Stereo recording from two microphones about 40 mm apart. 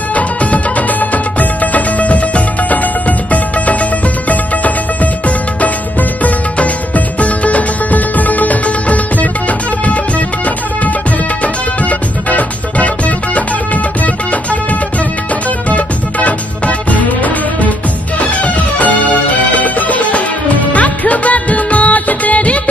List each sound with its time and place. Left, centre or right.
0.1 s music: left
7.2 s music: left
11.4 s music: left
20.7 s music of bollywood: left